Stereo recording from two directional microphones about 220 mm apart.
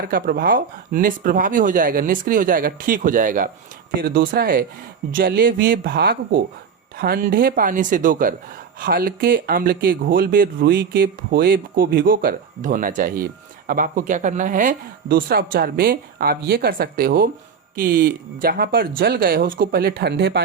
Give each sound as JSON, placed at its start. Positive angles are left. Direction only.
{"t": 0.0, "sound": "speech", "side_deg": -40}